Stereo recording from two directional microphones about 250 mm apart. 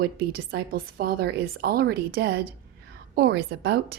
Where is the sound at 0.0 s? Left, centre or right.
Right.